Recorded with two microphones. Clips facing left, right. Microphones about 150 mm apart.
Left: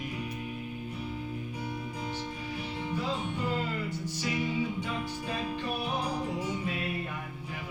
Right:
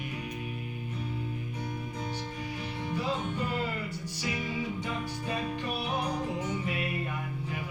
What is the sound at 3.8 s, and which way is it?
Music, 15° right (ahead or behind).